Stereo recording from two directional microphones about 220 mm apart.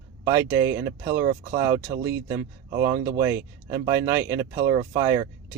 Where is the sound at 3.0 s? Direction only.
15° right (ahead or behind).